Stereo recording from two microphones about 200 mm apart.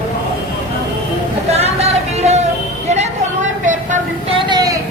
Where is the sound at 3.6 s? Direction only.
40° right (ahead or behind).